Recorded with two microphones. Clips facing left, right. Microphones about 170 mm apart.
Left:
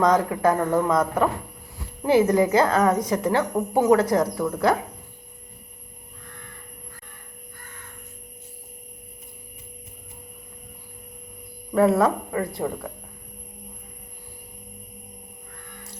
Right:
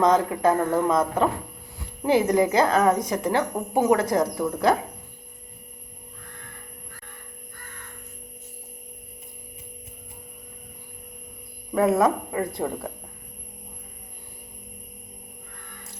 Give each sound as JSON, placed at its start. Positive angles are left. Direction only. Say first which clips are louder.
{"t": 0.0, "sound": "a woman's voice", "louder": "even", "side_deg": -20}
{"t": 11.7, "sound": "speech", "louder": "left 1 dB", "side_deg": -15}